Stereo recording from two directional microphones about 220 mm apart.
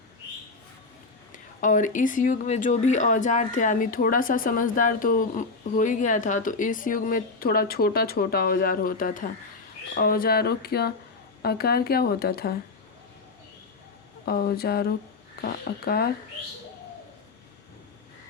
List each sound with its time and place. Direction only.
1.3 s speech: 35° left (ahead or behind)
14.3 s speech: 45° left (ahead or behind)